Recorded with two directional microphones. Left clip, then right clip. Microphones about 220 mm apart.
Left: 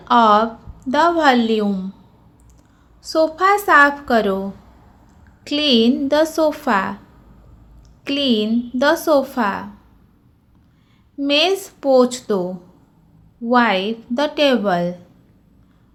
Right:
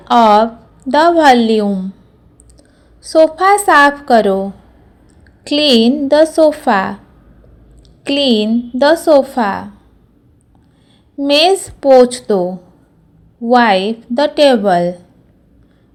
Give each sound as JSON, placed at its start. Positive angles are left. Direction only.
{"t": 0.0, "sound": "a woman's voice", "side_deg": -20}
{"t": 3.0, "sound": "a woman's voice", "side_deg": -15}
{"t": 8.0, "sound": "a woman's voice", "side_deg": -20}
{"t": 11.2, "sound": "a woman's voice", "side_deg": -20}
{"t": 13.5, "sound": "a woman's voice", "side_deg": -20}